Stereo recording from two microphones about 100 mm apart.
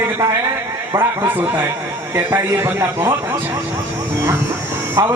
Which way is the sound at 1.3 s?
20° right (ahead or behind).